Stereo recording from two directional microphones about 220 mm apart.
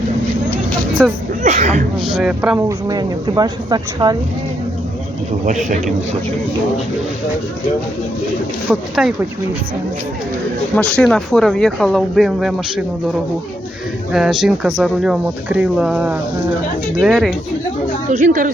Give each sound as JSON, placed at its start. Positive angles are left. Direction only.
{"t": 1.0, "sound": "speech", "side_deg": 5}
{"t": 1.5, "sound": "speech", "side_deg": -35}
{"t": 2.2, "sound": "speech", "side_deg": -5}
{"t": 2.8, "sound": "speech", "side_deg": -15}
{"t": 8.7, "sound": "speech", "side_deg": -5}
{"t": 10.8, "sound": "speech", "side_deg": 5}
{"t": 14.1, "sound": "speech", "side_deg": 0}
{"t": 18.1, "sound": "speech", "side_deg": -35}